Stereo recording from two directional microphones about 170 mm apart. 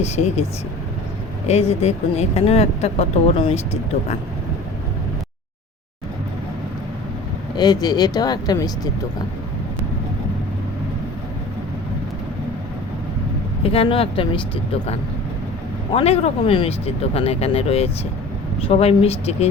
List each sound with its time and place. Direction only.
0.0 s speech: 40° left (ahead or behind)
1.5 s speech: 40° left (ahead or behind)
7.5 s speech: 25° left (ahead or behind)
13.6 s speech: 35° left (ahead or behind)